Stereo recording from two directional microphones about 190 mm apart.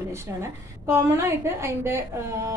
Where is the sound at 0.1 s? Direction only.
15° right (ahead or behind).